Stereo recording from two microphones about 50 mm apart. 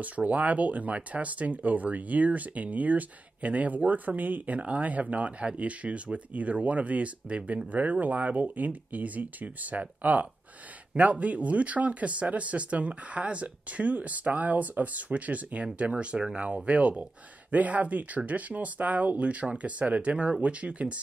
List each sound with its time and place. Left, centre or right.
0.0 s speech: right